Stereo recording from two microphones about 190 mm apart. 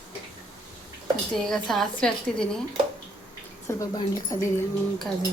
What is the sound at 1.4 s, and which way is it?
A woman's voice, centre (ahead or behind).